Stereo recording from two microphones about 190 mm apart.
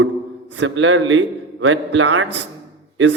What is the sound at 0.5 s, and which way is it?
A man's voice, 80° right.